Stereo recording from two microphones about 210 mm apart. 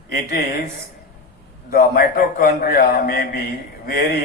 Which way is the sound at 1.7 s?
45° left (ahead or behind).